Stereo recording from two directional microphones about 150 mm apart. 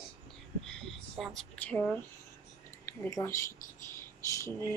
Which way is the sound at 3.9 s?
20° left (ahead or behind).